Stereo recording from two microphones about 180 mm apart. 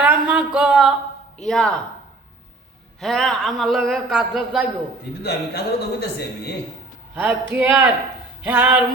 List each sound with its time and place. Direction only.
0.0 s a sound: 5° right (ahead or behind)
1.4 s a man's voice: centre (ahead or behind)
3.0 s a man's voice: centre (ahead or behind)
5.2 s a man's voice: 65° left (ahead or behind)
7.5 s a man's voice: 10° right (ahead or behind)
8.4 s a sound: 10° right (ahead or behind)